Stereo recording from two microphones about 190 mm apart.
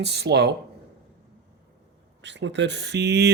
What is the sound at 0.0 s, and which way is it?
Speech, 60° right (ahead or behind).